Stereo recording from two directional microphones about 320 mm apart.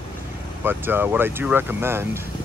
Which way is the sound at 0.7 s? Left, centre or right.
Centre.